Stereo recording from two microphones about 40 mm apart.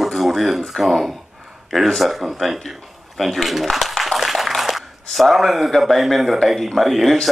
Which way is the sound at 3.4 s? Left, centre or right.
Centre.